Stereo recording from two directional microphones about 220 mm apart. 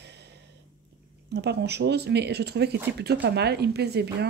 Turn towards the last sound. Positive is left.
turn(degrees=-50)  # may be behind; listen again after turning